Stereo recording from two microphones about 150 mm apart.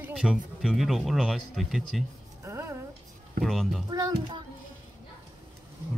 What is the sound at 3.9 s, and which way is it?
Speech, 25° right (ahead or behind).